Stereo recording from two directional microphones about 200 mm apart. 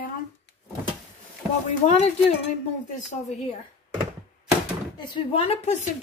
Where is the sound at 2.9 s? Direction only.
35° left (ahead or behind).